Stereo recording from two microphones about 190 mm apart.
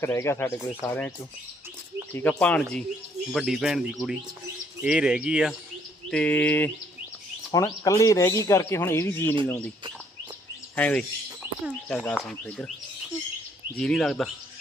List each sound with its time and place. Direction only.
0.0 s speech: 15° left (ahead or behind)
2.1 s speech: 5° left (ahead or behind)
6.1 s speech: 5° left (ahead or behind)
10.8 s speech: 5° left (ahead or behind)
13.7 s speech: centre (ahead or behind)